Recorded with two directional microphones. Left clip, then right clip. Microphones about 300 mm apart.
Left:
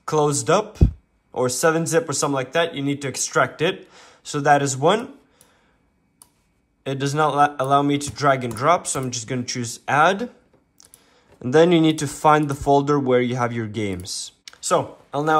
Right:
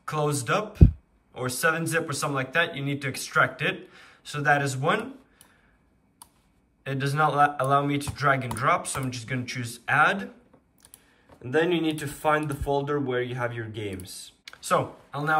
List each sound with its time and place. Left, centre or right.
0.0 s a man's voice: centre
6.8 s a man's voice: centre
11.5 s a man's voice: centre
14.4 s a sound: centre